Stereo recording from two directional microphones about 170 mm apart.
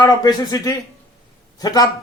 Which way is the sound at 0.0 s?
20° left (ahead or behind).